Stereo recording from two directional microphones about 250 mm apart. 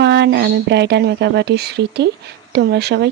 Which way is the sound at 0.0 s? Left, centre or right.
Right.